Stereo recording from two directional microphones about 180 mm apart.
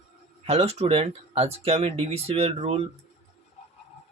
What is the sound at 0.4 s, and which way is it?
Speech, 35° right (ahead or behind).